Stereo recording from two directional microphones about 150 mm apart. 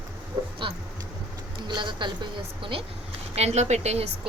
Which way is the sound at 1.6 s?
30° right (ahead or behind).